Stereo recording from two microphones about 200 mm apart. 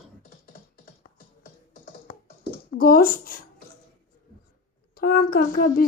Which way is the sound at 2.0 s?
50° left (ahead or behind).